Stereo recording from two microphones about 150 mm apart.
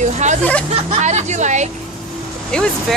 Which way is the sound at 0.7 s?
50° right (ahead or behind).